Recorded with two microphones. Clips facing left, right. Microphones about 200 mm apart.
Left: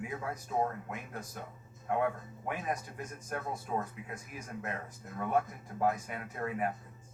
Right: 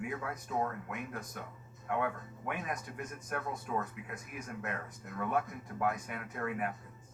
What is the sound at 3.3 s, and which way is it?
A man's voice, 30° left (ahead or behind).